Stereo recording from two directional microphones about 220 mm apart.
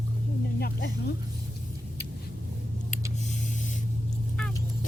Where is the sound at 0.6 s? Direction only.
45° left (ahead or behind).